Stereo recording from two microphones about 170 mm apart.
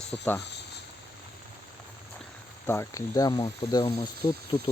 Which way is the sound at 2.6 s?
15° left (ahead or behind).